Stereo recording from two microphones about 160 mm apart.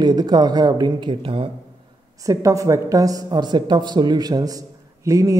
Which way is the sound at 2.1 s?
20° right (ahead or behind).